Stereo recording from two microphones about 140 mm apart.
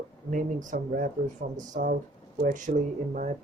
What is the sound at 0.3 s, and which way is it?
Speech, 65° right (ahead or behind).